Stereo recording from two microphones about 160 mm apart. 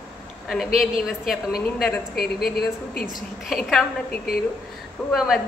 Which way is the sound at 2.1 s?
75° left (ahead or behind).